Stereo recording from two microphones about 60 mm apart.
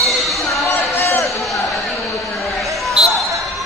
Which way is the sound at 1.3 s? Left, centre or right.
Centre.